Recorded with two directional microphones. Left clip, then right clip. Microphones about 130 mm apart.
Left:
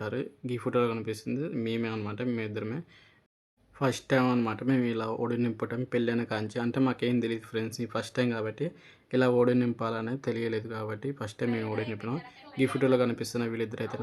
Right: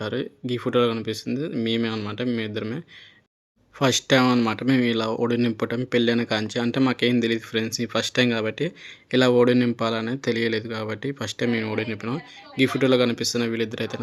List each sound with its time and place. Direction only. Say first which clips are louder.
0.0 s speech: right 6 dB; 20° right (ahead or behind)